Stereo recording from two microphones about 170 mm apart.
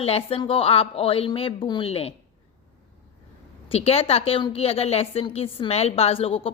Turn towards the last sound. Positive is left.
turn(degrees=35)  # may be behind; listen again after turning